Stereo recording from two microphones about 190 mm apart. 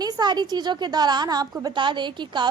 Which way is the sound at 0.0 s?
20° right (ahead or behind).